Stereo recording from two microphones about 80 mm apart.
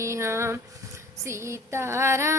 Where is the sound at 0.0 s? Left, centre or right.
Right.